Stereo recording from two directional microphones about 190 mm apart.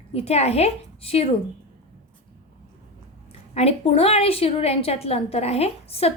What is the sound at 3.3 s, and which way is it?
A woman's voice, 30° left (ahead or behind).